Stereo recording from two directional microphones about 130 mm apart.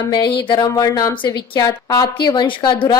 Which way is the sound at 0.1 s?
35° left (ahead or behind).